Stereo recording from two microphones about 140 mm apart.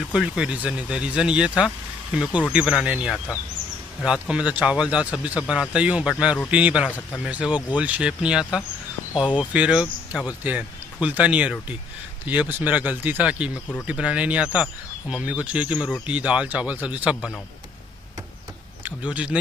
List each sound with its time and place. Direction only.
0.1 s speech: 5° right (ahead or behind)
9.1 s speech: 35° left (ahead or behind)
9.5 s speech: 5° right (ahead or behind)
18.9 s speech: 10° right (ahead or behind)